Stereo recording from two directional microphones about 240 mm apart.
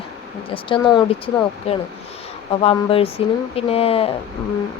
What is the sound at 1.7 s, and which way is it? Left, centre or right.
Speech, left.